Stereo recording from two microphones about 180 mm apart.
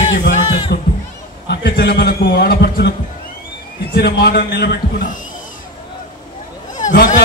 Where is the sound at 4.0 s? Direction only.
60° left (ahead or behind).